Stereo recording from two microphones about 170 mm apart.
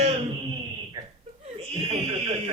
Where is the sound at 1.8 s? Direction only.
35° right (ahead or behind).